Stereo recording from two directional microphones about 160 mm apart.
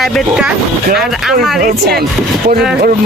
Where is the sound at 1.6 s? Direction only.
70° right (ahead or behind).